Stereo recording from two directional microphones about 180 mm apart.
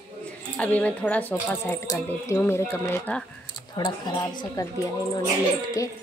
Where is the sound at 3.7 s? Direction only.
25° left (ahead or behind).